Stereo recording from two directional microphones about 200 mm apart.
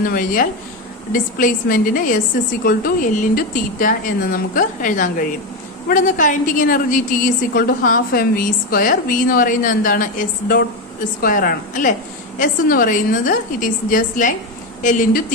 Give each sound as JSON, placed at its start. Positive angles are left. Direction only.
{"t": 0.0, "sound": "a woman's voice", "side_deg": 45}